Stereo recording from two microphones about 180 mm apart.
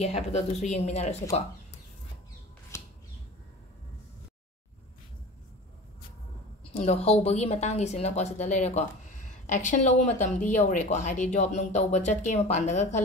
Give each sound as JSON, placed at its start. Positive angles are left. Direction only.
{"t": 0.0, "sound": "speech", "side_deg": 35}
{"t": 2.7, "sound": "squawk", "side_deg": 15}
{"t": 6.7, "sound": "a sound", "side_deg": 35}
{"t": 7.1, "sound": "speech", "side_deg": 35}